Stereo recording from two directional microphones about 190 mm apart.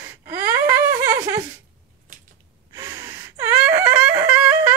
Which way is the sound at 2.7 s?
15° right (ahead or behind).